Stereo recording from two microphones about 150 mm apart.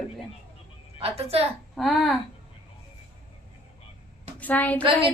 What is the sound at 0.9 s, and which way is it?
Speech, 40° right (ahead or behind).